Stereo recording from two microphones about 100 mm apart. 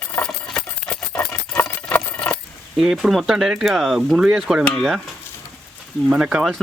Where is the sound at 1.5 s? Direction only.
25° left (ahead or behind).